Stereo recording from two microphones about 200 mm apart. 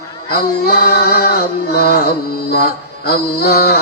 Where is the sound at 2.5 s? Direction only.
50° left (ahead or behind).